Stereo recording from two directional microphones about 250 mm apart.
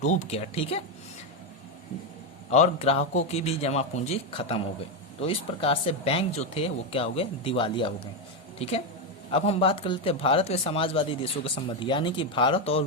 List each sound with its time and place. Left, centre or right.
0.0 s speech: left
2.5 s a woman's voice: left